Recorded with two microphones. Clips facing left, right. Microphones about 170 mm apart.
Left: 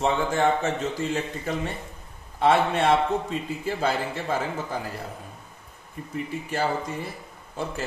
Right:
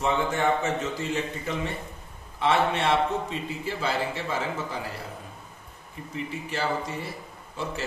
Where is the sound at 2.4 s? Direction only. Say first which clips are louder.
Left 3 dB; 45° left (ahead or behind).